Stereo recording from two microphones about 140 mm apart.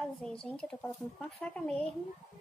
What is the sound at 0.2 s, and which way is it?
Speech, 5° left (ahead or behind).